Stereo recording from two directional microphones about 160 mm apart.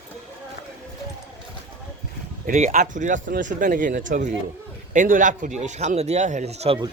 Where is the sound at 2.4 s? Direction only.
50° right (ahead or behind).